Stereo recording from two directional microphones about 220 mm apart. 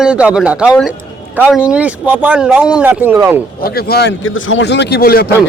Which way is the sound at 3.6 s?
45° left (ahead or behind).